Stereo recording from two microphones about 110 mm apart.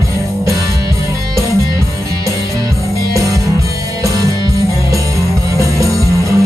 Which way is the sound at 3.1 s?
30° right (ahead or behind).